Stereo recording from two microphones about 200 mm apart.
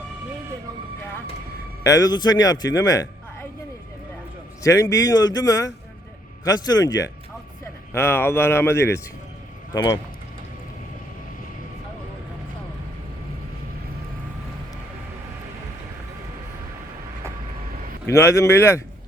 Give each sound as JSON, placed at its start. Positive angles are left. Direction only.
{"t": 1.8, "sound": "speech", "side_deg": 15}
{"t": 2.7, "sound": "a sound", "side_deg": 20}
{"t": 4.6, "sound": "speech", "side_deg": 15}
{"t": 18.0, "sound": "speech", "side_deg": 15}